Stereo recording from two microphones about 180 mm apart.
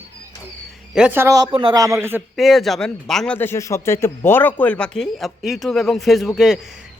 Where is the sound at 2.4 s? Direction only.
Centre (ahead or behind).